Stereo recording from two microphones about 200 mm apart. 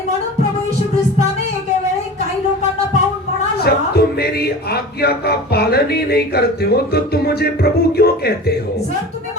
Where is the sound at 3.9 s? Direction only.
50° left (ahead or behind).